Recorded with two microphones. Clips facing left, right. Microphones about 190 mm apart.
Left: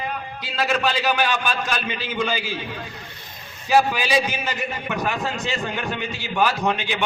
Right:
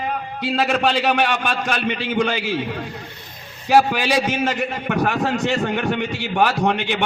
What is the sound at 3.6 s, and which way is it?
A man's voice, 65° right (ahead or behind).